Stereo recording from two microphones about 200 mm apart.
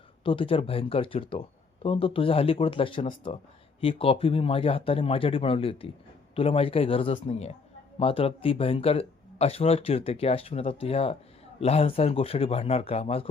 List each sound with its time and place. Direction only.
0.3 s speech: 25° left (ahead or behind)